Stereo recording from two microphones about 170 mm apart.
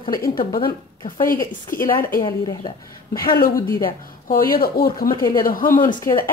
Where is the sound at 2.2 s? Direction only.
25° left (ahead or behind).